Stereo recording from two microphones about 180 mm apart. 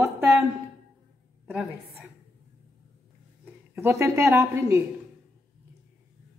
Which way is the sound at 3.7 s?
15° right (ahead or behind).